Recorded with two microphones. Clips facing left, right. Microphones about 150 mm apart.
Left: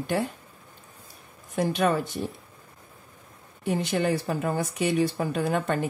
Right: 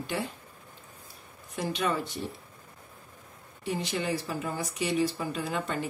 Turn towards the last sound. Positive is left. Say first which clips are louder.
# left 6 dB
turn(degrees=55)  # may be behind; listen again after turning